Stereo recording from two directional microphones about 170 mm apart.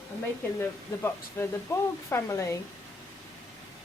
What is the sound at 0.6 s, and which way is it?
Speech, 15° left (ahead or behind).